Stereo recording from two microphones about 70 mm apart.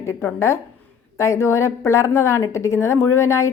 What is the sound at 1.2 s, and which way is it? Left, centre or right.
A woman's voice, left.